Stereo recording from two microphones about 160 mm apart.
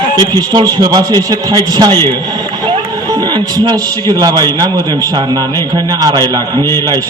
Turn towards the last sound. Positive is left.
turn(degrees=-25)  # may be behind; listen again after turning